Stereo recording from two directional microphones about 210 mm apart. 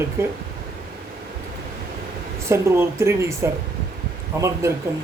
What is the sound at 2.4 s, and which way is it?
A woman's voice, 15° right (ahead or behind).